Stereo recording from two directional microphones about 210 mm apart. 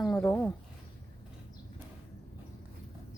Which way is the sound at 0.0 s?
5° left (ahead or behind).